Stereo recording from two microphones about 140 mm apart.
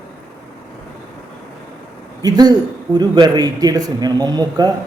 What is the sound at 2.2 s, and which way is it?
Speech, 30° right (ahead or behind).